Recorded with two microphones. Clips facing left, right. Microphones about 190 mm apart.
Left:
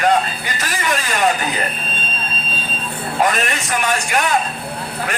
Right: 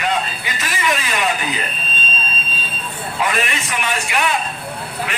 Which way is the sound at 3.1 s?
40° left (ahead or behind).